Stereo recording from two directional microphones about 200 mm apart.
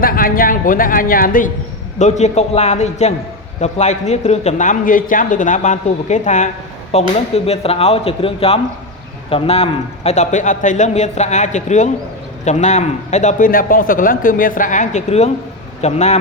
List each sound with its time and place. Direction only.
0.0 s a man's voice: 45° left (ahead or behind)